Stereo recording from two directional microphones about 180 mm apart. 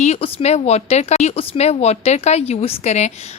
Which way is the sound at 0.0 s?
35° left (ahead or behind).